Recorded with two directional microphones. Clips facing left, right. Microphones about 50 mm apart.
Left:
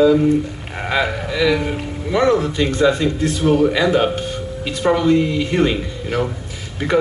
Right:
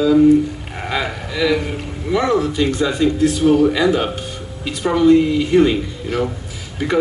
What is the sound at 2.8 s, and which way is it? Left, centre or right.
Speech, centre.